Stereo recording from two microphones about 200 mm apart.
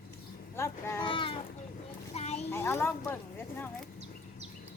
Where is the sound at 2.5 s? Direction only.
10° left (ahead or behind).